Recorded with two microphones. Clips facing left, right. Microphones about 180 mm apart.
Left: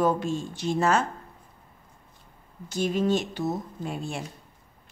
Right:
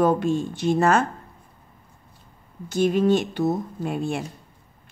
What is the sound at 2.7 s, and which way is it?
A woman's voice, 60° right (ahead or behind).